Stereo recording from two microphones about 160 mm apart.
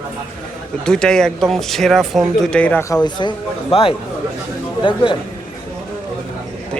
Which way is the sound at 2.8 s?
25° left (ahead or behind).